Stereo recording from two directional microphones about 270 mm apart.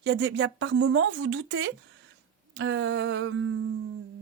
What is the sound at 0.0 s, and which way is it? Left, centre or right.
Speech, right.